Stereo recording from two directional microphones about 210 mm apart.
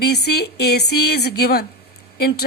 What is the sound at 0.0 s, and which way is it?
A woman's voice, 50° left (ahead or behind).